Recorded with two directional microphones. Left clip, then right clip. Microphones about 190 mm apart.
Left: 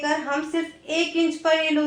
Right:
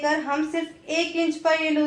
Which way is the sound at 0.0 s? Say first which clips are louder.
Right 1 dB; 20° left (ahead or behind).